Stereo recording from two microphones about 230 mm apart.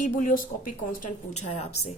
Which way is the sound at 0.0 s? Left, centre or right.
Left.